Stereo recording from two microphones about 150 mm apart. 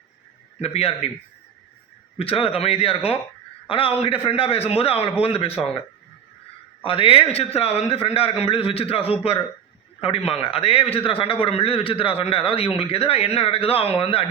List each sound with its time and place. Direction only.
0.6 s a man's voice: 40° left (ahead or behind)
2.1 s a man's voice: 40° left (ahead or behind)
6.8 s a man's voice: 40° left (ahead or behind)